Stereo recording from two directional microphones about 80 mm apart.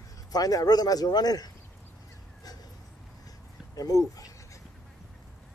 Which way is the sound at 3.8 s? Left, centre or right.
Left.